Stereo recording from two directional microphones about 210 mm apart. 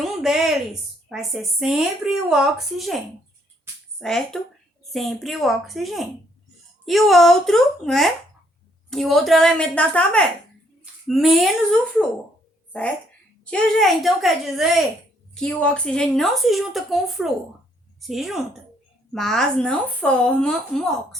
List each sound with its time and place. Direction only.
0.0 s a woman's voice: centre (ahead or behind)
13.4 s a woman's voice: 5° left (ahead or behind)